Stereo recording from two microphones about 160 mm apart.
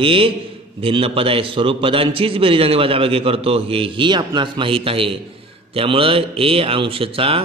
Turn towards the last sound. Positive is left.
turn(degrees=-35)  # may be behind; listen again after turning